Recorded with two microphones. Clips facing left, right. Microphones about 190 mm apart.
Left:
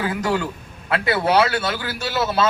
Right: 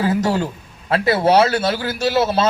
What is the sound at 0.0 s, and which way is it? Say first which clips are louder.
A man's voice: right 4 dB; 35° right (ahead or behind).